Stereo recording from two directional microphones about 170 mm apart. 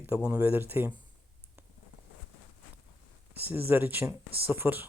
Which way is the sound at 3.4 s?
10° right (ahead or behind).